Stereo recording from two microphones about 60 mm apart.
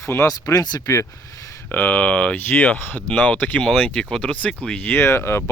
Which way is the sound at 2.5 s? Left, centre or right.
Left.